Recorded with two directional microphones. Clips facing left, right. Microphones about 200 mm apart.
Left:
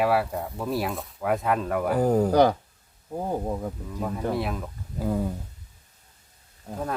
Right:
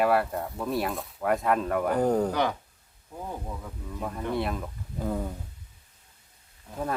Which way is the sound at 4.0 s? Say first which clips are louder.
Left 2 dB; 5° left (ahead or behind).